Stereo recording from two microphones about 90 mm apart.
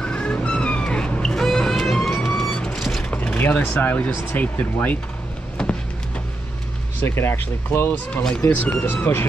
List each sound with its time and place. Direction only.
0.0 s vehicle: 10° left (ahead or behind)
2.2 s music: 5° left (ahead or behind)
3.1 s speech: 15° left (ahead or behind)
7.0 s speech: 25° left (ahead or behind)